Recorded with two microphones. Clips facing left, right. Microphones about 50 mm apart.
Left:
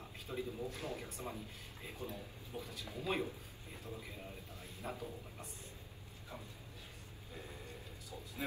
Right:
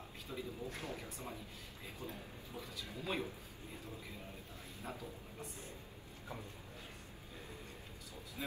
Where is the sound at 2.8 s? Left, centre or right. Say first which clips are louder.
Left 2 dB; left.